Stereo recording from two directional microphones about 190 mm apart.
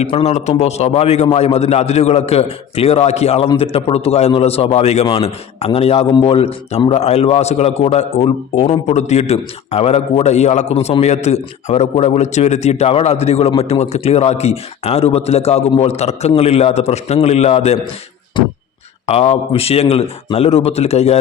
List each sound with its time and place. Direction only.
0.0 s a man's voice: 35° left (ahead or behind)
19.0 s a man's voice: 35° left (ahead or behind)